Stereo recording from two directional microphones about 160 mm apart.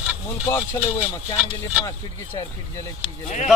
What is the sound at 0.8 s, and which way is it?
Speech, 10° right (ahead or behind).